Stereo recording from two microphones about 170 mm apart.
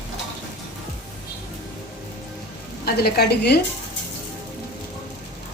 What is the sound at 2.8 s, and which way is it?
Speech, 65° left (ahead or behind).